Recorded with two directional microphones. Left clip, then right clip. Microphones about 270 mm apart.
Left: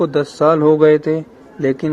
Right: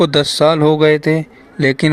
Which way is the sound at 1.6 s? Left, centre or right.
Right.